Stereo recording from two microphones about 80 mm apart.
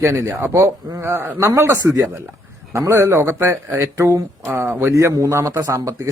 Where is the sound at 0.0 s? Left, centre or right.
Right.